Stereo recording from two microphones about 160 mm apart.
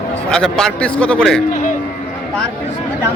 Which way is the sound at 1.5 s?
55° left (ahead or behind).